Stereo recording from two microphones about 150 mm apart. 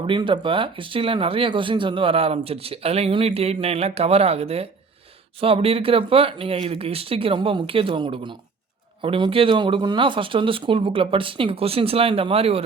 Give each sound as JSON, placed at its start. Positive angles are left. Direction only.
{"t": 0.0, "sound": "speech", "side_deg": -35}